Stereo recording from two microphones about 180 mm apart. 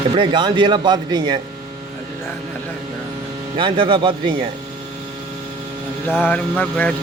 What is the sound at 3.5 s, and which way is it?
Speech, 30° right (ahead or behind).